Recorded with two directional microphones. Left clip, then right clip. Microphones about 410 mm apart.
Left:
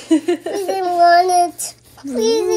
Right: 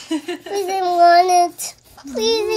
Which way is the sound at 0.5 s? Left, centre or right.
Right.